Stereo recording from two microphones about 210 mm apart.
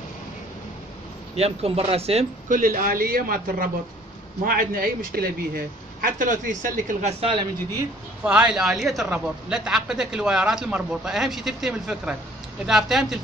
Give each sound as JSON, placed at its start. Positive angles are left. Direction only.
{"t": 1.3, "sound": "speech", "side_deg": -30}
{"t": 2.6, "sound": "a man's voice", "side_deg": -40}
{"t": 7.7, "sound": "a man's voice", "side_deg": -5}